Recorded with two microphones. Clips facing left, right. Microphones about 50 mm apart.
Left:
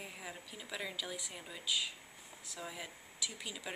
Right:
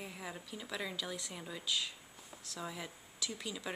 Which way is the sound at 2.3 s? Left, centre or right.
Centre.